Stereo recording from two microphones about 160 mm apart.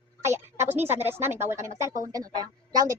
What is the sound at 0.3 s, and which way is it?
Speech, 15° right (ahead or behind).